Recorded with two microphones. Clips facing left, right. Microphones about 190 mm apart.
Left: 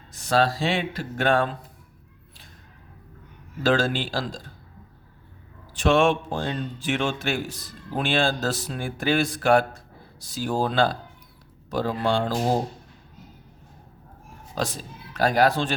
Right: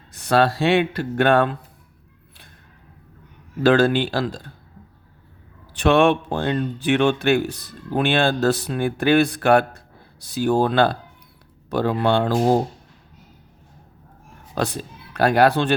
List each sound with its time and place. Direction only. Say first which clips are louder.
0.1 s speech: right 4 dB; 60° right (ahead or behind)
3.6 s speech: right 6 dB; 60° right (ahead or behind)
5.7 s speech: right 4 dB; 60° right (ahead or behind)
14.5 s speech: right 4 dB; 60° right (ahead or behind)